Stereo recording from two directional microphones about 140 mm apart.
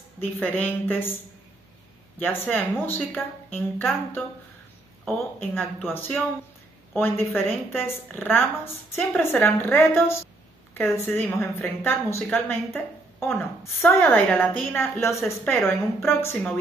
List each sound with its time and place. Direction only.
0.2 s a woman's voice: 10° left (ahead or behind)
2.1 s a woman's voice: 15° left (ahead or behind)